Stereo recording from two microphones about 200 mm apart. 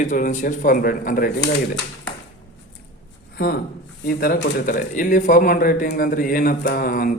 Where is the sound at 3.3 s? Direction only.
55° left (ahead or behind).